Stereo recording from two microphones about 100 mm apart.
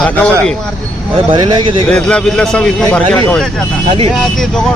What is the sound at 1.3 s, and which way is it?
Speech, 50° right (ahead or behind).